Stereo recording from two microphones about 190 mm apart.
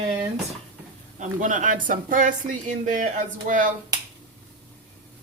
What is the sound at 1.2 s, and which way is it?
Speech, 40° right (ahead or behind).